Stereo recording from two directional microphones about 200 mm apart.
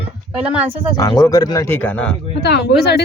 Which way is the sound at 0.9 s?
20° left (ahead or behind).